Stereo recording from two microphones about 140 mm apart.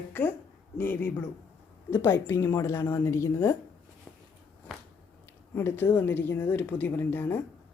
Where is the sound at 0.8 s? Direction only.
15° left (ahead or behind).